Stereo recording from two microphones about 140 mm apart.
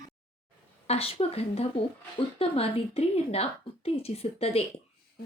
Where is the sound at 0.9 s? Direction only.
45° left (ahead or behind).